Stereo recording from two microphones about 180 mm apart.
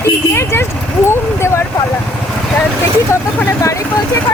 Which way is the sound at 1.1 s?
15° left (ahead or behind).